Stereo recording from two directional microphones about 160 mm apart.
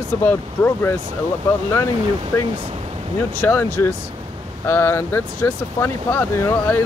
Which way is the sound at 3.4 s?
15° left (ahead or behind).